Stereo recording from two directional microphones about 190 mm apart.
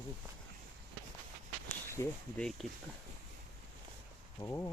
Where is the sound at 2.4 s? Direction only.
Centre (ahead or behind).